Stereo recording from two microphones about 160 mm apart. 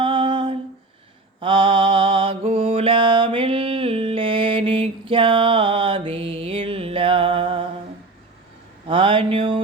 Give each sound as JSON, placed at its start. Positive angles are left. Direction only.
{"t": 0.0, "sound": "humming", "side_deg": -30}
{"t": 1.4, "sound": "mantra", "side_deg": -30}
{"t": 8.9, "sound": "mantra", "side_deg": -30}